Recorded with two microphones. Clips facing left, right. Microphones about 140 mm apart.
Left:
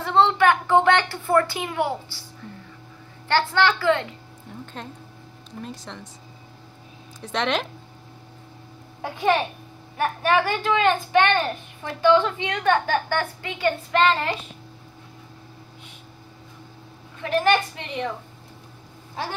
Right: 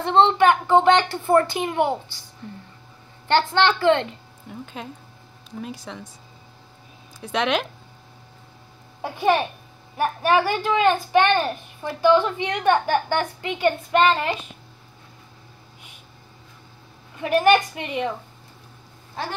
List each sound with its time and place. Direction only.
0.0 s a woman's voice: 20° right (ahead or behind)
1.2 s a woman's voice: 30° right (ahead or behind)
3.3 s a woman's voice: 20° right (ahead or behind)
4.8 s speech: 5° right (ahead or behind)
7.2 s speech: 5° right (ahead or behind)
9.0 s a woman's voice: 15° right (ahead or behind)
17.2 s a woman's voice: 15° right (ahead or behind)